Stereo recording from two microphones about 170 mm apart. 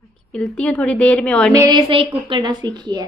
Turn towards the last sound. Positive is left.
turn(degrees=-25)  # may be behind; listen again after turning